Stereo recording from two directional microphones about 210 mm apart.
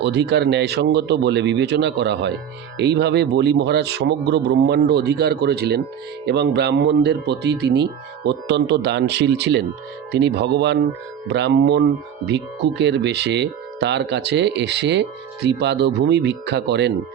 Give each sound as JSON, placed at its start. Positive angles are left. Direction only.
{"t": 0.0, "sound": "speech", "side_deg": -55}